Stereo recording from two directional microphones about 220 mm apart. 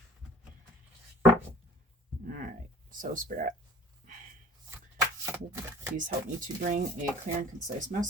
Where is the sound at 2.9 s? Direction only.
35° right (ahead or behind).